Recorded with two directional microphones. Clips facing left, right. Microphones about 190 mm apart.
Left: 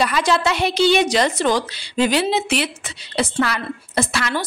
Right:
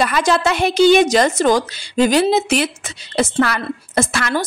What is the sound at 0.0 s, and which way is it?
A woman's voice, 50° right (ahead or behind).